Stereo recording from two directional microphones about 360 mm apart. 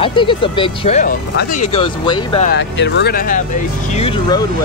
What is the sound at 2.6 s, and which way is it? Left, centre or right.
Speech, left.